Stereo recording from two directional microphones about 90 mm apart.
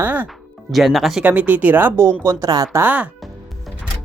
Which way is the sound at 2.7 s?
20° right (ahead or behind).